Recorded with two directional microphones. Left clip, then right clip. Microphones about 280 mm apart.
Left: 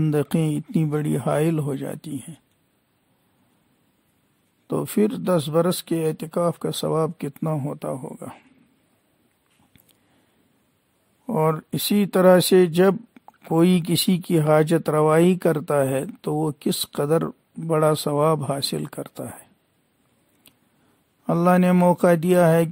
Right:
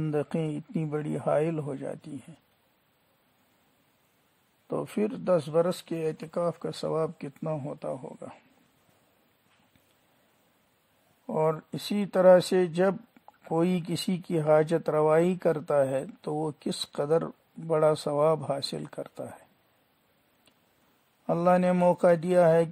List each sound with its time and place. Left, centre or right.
0.0 s speech: left
4.6 s speech: left
11.2 s speech: left
21.3 s speech: left